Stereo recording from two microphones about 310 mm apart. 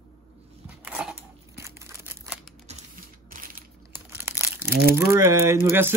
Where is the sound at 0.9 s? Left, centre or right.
Centre.